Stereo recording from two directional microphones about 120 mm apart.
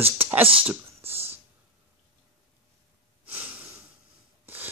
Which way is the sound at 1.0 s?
55° right (ahead or behind).